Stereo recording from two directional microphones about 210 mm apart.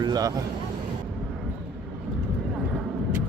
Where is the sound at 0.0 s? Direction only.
20° right (ahead or behind).